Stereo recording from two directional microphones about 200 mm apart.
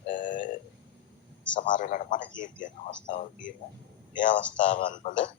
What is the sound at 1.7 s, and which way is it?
A man's voice, 40° left (ahead or behind).